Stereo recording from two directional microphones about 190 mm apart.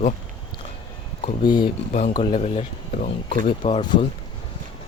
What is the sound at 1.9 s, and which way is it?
Speech, 40° left (ahead or behind).